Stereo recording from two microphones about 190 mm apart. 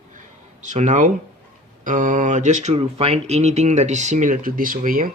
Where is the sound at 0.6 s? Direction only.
40° right (ahead or behind).